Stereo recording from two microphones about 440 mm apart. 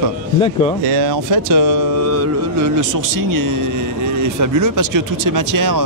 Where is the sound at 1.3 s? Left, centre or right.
Right.